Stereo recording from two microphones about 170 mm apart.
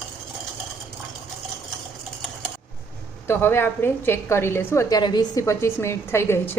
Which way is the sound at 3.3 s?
15° left (ahead or behind).